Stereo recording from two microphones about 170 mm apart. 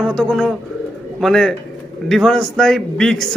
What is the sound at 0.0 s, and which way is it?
A man's voice, 5° left (ahead or behind).